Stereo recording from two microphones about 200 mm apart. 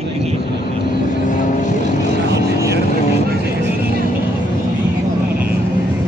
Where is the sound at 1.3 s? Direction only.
40° left (ahead or behind).